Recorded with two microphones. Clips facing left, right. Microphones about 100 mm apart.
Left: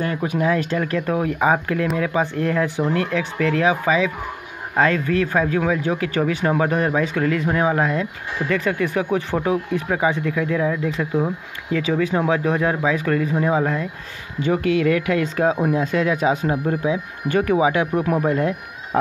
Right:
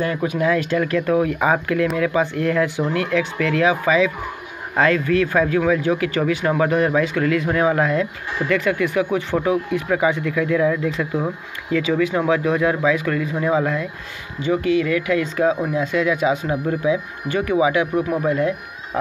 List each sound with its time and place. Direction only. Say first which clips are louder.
0.0 s speech: right 1 dB; 40° left (ahead or behind)
14.4 s speech: even; 55° left (ahead or behind)